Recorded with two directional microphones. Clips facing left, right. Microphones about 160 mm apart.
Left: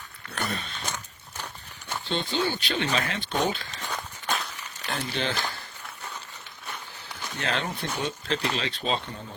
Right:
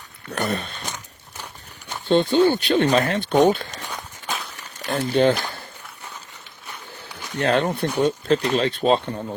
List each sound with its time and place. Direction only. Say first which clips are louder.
0.3 s speech: right 7 dB; 55° right (ahead or behind)
0.9 s a sound: right 1 dB; 15° right (ahead or behind)
2.0 s speech: right 12 dB; 50° right (ahead or behind)
4.9 s speech: right 12 dB; 50° right (ahead or behind)
7.3 s speech: right 10 dB; 50° right (ahead or behind)